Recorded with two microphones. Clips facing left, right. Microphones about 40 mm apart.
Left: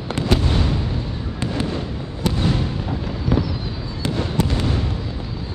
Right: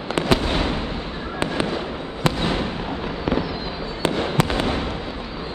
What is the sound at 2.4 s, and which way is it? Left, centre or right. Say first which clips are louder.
Fireworks: left 1 dB; right.